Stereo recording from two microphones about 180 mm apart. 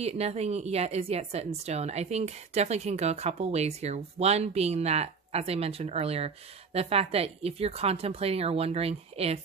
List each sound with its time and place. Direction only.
0.0 s a woman's voice: 35° right (ahead or behind)